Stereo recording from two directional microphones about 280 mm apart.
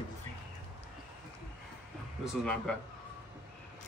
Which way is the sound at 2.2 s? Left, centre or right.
Centre.